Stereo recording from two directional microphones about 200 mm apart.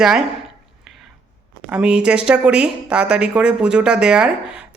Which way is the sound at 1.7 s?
5° right (ahead or behind).